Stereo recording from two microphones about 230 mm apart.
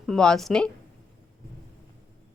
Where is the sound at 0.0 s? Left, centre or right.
Centre.